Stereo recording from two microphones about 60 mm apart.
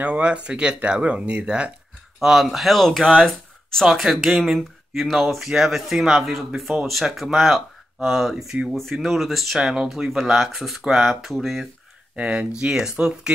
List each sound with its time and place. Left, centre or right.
0.0 s speech: right
2.1 s speech: centre
12.2 s speech: centre